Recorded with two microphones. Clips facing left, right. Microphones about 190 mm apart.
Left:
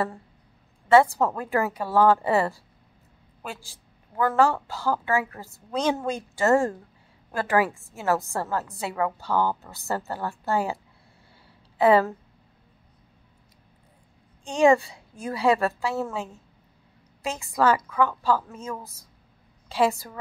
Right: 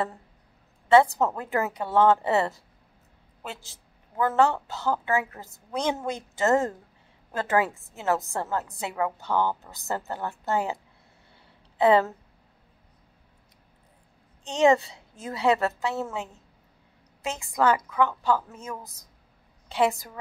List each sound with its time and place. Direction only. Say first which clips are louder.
0.8 s a woman's voice: left 1 dB; 20° right (ahead or behind)
4.2 s a woman's voice: left 1 dB; 20° right (ahead or behind)
11.8 s a woman's voice: left 1 dB; 20° right (ahead or behind)
14.5 s a woman's voice: left 2 dB; 20° right (ahead or behind)